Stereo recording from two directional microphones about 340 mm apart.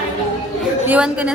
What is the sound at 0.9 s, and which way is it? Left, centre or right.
Speech, centre.